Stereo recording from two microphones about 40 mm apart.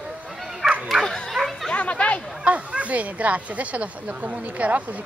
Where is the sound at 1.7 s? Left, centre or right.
Left.